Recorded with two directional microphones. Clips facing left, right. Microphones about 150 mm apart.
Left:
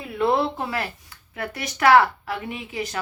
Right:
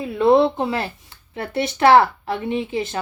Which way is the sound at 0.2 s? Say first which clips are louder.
Right 7 dB; 20° right (ahead or behind).